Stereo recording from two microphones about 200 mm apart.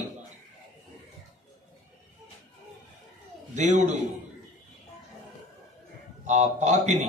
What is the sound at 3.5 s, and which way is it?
Speech, 35° right (ahead or behind).